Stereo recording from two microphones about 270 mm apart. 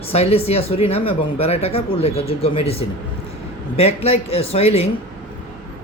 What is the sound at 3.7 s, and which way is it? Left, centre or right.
Speech, left.